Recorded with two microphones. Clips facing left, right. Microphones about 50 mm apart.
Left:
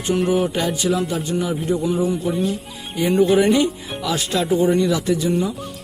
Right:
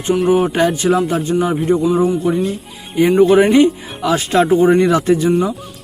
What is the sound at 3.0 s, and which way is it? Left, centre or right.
Speech, right.